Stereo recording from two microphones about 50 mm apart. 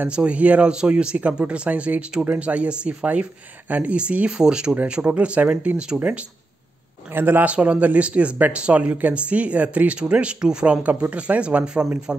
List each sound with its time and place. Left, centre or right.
0.1 s speech: right
7.1 s a man's voice: right
7.4 s speech: right